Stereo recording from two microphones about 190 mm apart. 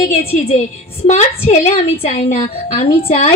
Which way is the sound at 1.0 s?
35° left (ahead or behind).